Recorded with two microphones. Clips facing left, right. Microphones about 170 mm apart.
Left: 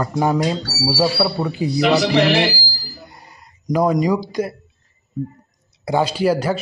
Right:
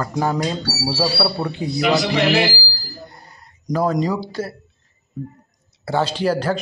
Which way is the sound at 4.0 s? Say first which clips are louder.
Left 3 dB; 15° left (ahead or behind).